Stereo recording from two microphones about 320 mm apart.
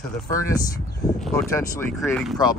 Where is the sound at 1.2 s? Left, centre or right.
Centre.